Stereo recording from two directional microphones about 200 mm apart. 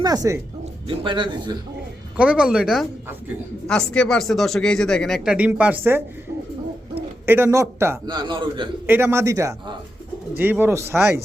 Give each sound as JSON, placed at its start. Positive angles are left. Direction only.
{"t": 0.0, "sound": "a man's voice", "side_deg": -20}
{"t": 2.1, "sound": "speech", "side_deg": -5}
{"t": 7.3, "sound": "a man's voice", "side_deg": -10}
{"t": 8.9, "sound": "a man's voice", "side_deg": -10}